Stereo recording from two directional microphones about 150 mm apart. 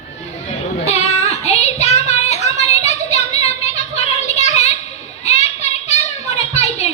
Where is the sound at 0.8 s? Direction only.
45° left (ahead or behind).